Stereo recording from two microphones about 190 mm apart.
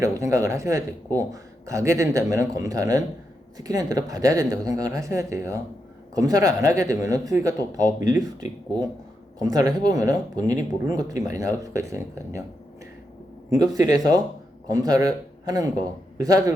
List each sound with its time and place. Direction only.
0.0 s speech: 15° right (ahead or behind)
13.5 s a man's voice: 20° right (ahead or behind)